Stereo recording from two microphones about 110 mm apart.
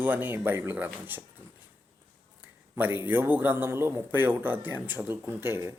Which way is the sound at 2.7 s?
20° right (ahead or behind).